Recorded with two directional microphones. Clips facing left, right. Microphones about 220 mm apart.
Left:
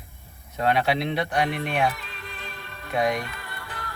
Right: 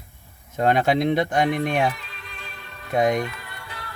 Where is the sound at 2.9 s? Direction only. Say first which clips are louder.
Right 4 dB; 45° right (ahead or behind).